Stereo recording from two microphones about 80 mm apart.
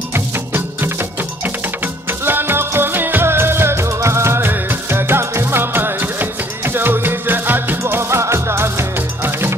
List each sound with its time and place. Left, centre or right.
0.1 s music: right
2.2 s music: right